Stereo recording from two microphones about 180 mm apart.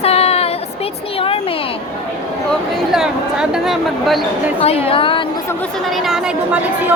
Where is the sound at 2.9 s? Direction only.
5° right (ahead or behind).